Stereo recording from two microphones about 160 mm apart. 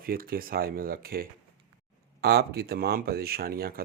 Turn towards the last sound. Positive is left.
turn(degrees=-70)  # may be behind; listen again after turning